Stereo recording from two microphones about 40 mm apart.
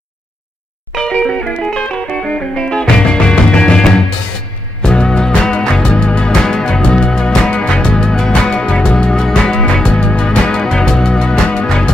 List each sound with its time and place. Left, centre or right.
1.2 s music: left
4.8 s music: left
9.8 s music: left